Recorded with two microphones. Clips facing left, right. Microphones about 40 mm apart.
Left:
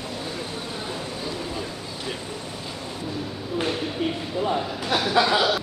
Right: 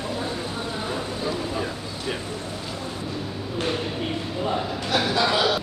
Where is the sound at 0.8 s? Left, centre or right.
Centre.